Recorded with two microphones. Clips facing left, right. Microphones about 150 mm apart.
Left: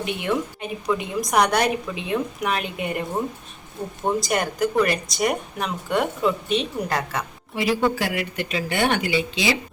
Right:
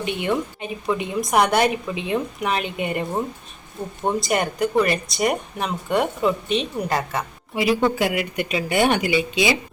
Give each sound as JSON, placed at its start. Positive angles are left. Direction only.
{"t": 0.0, "sound": "speech", "side_deg": 0}
{"t": 4.0, "sound": "speech", "side_deg": 0}
{"t": 6.8, "sound": "a woman's voice", "side_deg": -20}